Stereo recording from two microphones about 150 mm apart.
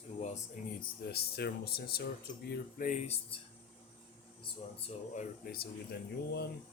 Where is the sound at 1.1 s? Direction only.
90° left.